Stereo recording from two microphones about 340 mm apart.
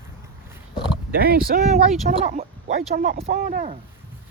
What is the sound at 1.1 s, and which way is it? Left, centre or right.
Speech, right.